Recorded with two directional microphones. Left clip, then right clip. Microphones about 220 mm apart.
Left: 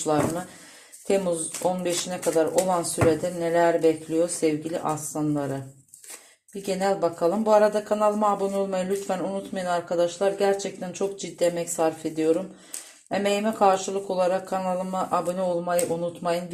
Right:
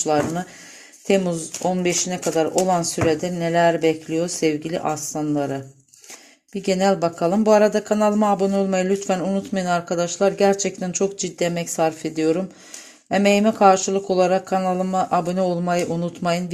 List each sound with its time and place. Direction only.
1.0 s speech: 50° right (ahead or behind)
6.5 s speech: 50° right (ahead or behind)